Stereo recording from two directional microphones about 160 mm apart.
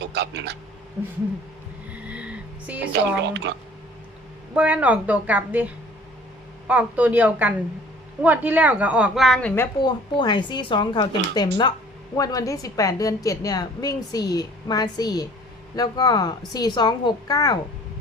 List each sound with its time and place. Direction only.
0.0 s a woman's voice: 90° right
1.9 s vehicle: 10° right (ahead or behind)
2.9 s a woman's voice: 90° right
4.5 s a woman's voice: 10° right (ahead or behind)
9.8 s a woman's voice: 30° left (ahead or behind)